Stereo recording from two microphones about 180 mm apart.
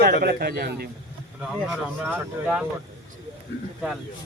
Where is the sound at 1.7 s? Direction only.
10° right (ahead or behind).